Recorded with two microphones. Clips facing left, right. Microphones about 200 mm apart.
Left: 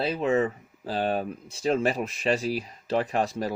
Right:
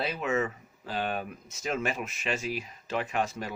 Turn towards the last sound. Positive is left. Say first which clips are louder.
# left 5 dB
turn(degrees=35)  # may be behind; listen again after turning